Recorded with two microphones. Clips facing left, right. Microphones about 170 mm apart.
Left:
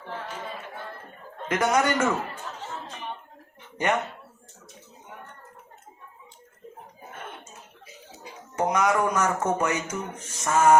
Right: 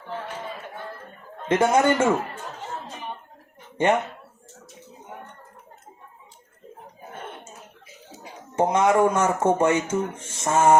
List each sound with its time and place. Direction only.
1.5 s speech: 25° right (ahead or behind)
3.8 s speech: 30° right (ahead or behind)
8.5 s speech: 25° right (ahead or behind)